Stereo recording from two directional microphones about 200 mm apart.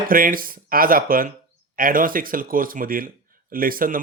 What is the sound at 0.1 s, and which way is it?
Speech, 45° right (ahead or behind).